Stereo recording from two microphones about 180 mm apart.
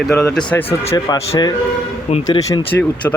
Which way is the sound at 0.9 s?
20° left (ahead or behind).